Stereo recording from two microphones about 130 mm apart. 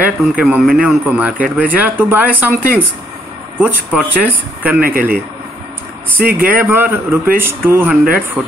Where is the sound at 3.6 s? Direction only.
10° right (ahead or behind).